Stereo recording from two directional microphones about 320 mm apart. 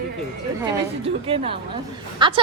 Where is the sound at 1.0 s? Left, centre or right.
Centre.